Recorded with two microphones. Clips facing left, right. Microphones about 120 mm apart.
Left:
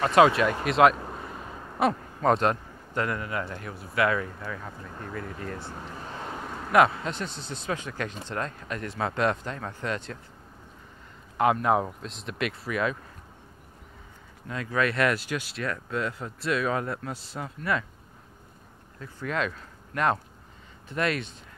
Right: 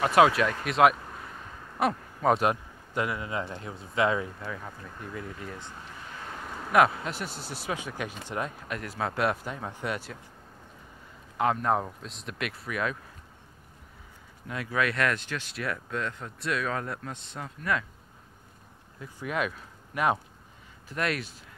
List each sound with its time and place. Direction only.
0.0 s speech: centre (ahead or behind)
0.9 s vehicle: 35° left (ahead or behind)
1.8 s speech: 5° right (ahead or behind); by 4.3 s 20° right (ahead or behind)
5.9 s vehicle: 35° left (ahead or behind)
6.6 s speech: centre (ahead or behind)
11.3 s speech: centre (ahead or behind)
14.5 s speech: 5° right (ahead or behind); by 15.5 s 10° left (ahead or behind)
15.5 s speech: 5° right (ahead or behind)
18.9 s speech: 15° right (ahead or behind)
20.9 s speech: centre (ahead or behind)